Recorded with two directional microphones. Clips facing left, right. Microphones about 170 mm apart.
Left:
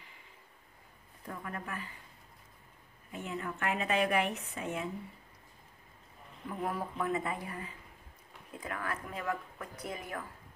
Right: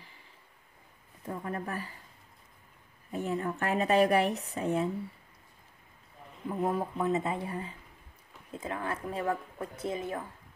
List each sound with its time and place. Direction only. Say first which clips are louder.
1.2 s speech: right 6 dB; 30° right (ahead or behind)
3.1 s speech: right 7 dB; 35° right (ahead or behind)
6.5 s speech: right 6 dB; 25° right (ahead or behind)